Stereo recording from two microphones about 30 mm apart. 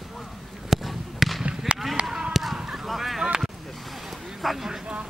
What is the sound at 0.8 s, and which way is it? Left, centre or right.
Basketball bounce, centre.